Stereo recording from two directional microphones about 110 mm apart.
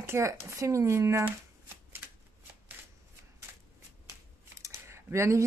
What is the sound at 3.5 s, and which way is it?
Shuffling cards, 20° right (ahead or behind).